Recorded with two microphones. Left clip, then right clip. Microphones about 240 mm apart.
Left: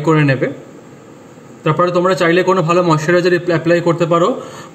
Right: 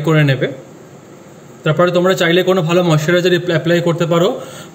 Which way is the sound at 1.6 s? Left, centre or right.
Centre.